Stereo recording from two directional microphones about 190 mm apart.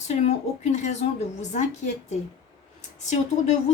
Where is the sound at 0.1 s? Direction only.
35° left (ahead or behind).